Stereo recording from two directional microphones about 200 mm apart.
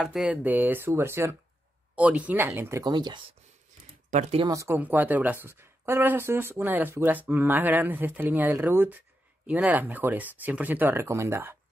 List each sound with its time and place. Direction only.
0.0 s speech: 5° right (ahead or behind); by 3.2 s 20° right (ahead or behind)
4.1 s speech: 35° right (ahead or behind)
4.5 s speech: 15° right (ahead or behind)